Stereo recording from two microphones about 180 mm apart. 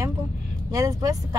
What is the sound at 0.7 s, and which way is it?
Speech, 20° right (ahead or behind).